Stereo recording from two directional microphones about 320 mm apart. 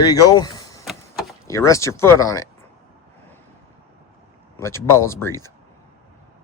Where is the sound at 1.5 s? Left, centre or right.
Centre.